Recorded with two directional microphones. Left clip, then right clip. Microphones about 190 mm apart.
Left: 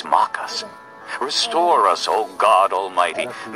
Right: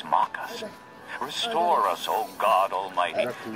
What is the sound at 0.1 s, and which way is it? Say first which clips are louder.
Music: left 7 dB; 40° left (ahead or behind).